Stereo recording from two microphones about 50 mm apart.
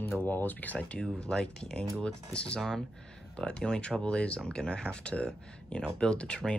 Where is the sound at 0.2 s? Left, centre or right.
Left.